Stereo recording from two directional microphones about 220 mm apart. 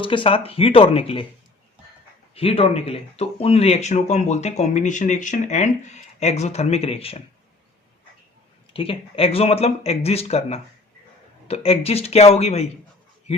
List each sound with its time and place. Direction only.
0.0 s speech: 25° left (ahead or behind)
2.3 s speech: 25° left (ahead or behind)
8.7 s speech: 25° left (ahead or behind)